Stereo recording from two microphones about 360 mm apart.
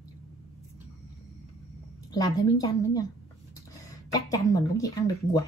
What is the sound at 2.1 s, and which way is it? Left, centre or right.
Speech, centre.